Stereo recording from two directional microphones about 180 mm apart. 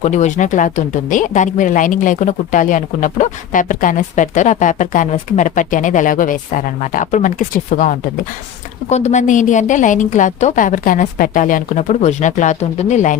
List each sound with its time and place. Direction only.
0.0 s speech: 40° left (ahead or behind)